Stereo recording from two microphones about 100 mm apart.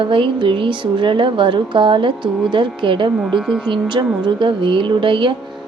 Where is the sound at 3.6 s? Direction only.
50° right (ahead or behind).